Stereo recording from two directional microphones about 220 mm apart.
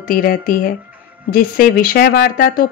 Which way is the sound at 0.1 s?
40° left (ahead or behind).